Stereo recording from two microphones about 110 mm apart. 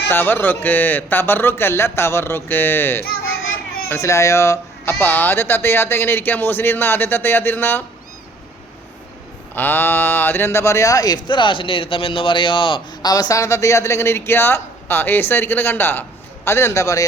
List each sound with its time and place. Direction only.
0.1 s speech: 20° left (ahead or behind)
9.6 s speech: 20° left (ahead or behind)